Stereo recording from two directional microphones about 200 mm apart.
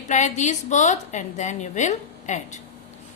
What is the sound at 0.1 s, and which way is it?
A woman's voice, 35° left (ahead or behind).